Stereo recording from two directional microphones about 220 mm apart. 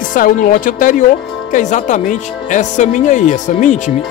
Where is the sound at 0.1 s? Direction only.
35° left (ahead or behind).